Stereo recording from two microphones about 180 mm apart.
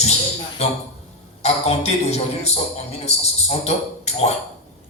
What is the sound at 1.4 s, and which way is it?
Music, 35° left (ahead or behind).